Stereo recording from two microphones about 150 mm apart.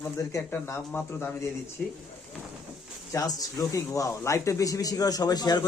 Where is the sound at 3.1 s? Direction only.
25° left (ahead or behind).